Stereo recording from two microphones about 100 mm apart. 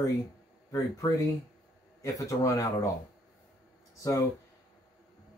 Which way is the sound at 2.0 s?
35° left (ahead or behind).